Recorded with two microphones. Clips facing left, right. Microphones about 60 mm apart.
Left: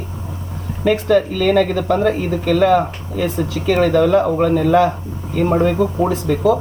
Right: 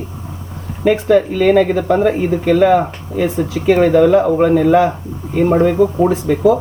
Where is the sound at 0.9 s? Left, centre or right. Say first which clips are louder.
Right 3 dB; right.